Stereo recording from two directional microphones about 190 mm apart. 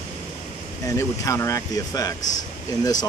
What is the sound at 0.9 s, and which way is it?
Speech, 15° left (ahead or behind).